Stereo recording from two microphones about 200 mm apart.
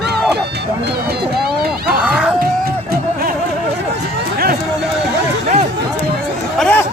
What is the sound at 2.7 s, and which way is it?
Music, 50° right (ahead or behind).